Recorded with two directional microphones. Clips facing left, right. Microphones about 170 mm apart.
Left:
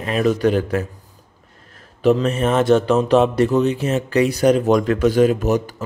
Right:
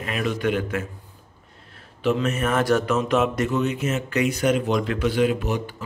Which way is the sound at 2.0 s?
35° left (ahead or behind).